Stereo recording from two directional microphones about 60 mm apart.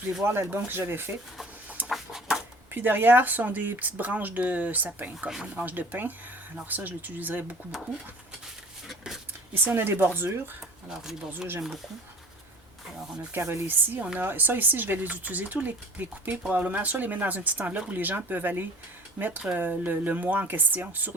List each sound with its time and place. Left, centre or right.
0.3 s speech: right
1.9 s a sound: centre
2.7 s speech: right
9.7 s speech: right
13.3 s speech: right